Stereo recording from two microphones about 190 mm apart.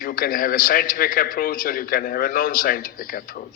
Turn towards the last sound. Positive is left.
turn(degrees=50)  # may be behind; listen again after turning